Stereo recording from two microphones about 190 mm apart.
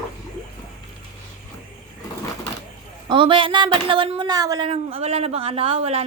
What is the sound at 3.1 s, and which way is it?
Speech, 25° right (ahead or behind).